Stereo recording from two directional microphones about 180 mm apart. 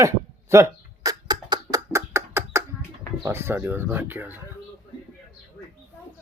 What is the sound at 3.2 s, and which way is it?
Speech, 15° right (ahead or behind).